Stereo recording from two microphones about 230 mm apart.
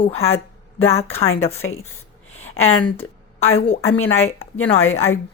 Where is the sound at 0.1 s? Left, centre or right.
Left.